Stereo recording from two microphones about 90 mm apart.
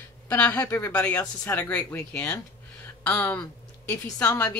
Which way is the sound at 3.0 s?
20° left (ahead or behind).